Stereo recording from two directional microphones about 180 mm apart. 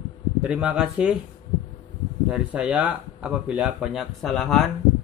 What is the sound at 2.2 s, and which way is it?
Speech, 5° right (ahead or behind).